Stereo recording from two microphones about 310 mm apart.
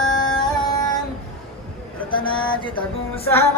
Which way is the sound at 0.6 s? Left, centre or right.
Centre.